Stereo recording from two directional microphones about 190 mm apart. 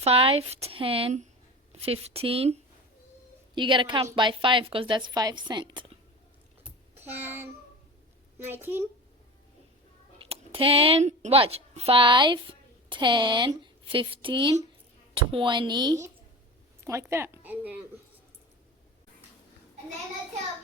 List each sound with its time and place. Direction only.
0.0 s a woman's voice: 30° right (ahead or behind)
6.7 s child singing: 10° right (ahead or behind)
8.4 s a child's voice: 10° right (ahead or behind)
10.2 s a woman's voice: 30° right (ahead or behind); by 17.7 s 10° right (ahead or behind)